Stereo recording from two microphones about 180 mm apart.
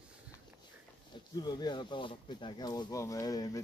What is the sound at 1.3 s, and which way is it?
Speech, 25° left (ahead or behind).